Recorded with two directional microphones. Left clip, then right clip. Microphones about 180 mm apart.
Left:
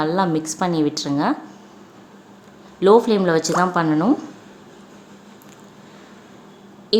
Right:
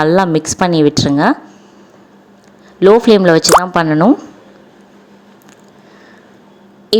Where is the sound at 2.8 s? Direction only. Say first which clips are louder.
Right 7 dB; 40° right (ahead or behind).